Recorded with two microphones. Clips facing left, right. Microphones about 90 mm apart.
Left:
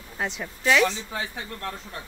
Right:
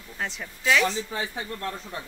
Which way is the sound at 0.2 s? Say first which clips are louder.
Left 3 dB; 5° left (ahead or behind).